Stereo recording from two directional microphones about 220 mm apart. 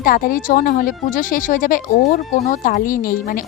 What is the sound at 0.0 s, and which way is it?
Speech, 40° left (ahead or behind).